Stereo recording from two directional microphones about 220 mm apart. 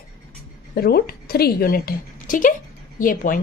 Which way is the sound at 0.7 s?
45° left (ahead or behind).